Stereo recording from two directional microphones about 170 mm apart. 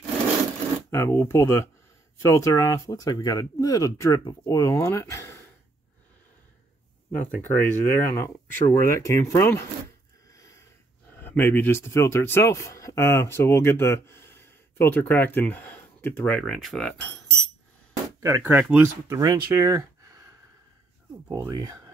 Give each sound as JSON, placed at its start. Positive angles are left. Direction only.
{"t": 0.8, "sound": "speech", "side_deg": 15}
{"t": 7.1, "sound": "speech", "side_deg": 10}
{"t": 10.3, "sound": "a sound", "side_deg": 20}
{"t": 11.1, "sound": "speech", "side_deg": 10}
{"t": 18.2, "sound": "speech", "side_deg": -15}
{"t": 21.3, "sound": "speech", "side_deg": -20}